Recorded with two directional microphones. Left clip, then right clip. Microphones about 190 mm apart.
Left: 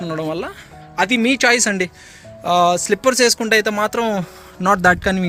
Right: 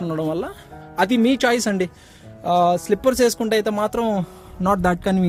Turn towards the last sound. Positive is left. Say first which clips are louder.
# left 5 dB
turn(degrees=-15)  # may be behind; listen again after turning